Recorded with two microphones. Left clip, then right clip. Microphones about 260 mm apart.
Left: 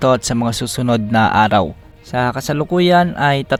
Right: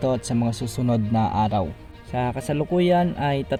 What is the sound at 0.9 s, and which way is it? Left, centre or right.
Speech, left.